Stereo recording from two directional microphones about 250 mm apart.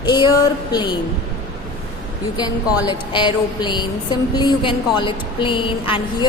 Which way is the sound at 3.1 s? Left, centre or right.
Centre.